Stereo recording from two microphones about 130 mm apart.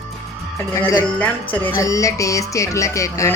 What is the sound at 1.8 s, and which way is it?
A woman's voice, 25° left (ahead or behind).